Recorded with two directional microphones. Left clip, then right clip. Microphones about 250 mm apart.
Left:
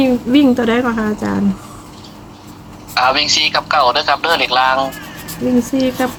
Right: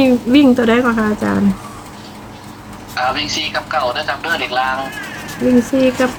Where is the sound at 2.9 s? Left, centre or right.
Left.